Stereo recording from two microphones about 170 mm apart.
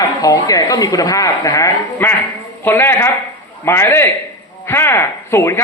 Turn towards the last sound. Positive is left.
turn(degrees=15)  # may be behind; listen again after turning